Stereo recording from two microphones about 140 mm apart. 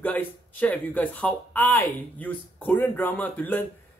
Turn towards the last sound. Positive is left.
turn(degrees=10)  # may be behind; listen again after turning